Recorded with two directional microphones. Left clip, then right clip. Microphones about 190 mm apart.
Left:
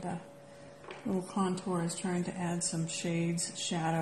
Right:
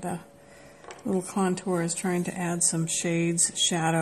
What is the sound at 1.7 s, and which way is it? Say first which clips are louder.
Speech: right 7 dB; 30° right (ahead or behind).